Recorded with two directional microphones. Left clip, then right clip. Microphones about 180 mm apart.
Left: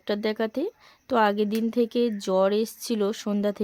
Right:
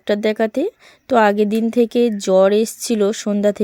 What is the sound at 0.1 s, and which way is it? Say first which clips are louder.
A woman's voice: right 9 dB; 30° right (ahead or behind).